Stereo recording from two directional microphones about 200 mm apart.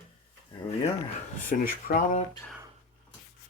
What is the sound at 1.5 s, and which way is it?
Speech, 45° left (ahead or behind).